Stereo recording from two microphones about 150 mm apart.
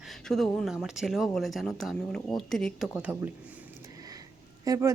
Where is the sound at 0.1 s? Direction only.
Centre (ahead or behind).